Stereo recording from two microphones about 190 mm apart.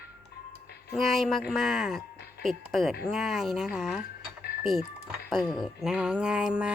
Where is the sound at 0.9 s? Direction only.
Centre (ahead or behind).